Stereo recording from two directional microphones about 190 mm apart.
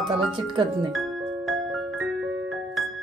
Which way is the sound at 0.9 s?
Centre (ahead or behind).